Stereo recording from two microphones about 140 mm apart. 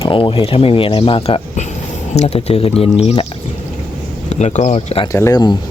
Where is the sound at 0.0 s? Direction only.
40° left (ahead or behind).